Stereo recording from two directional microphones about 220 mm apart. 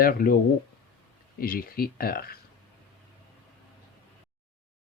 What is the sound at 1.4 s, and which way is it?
Speech, 40° left (ahead or behind).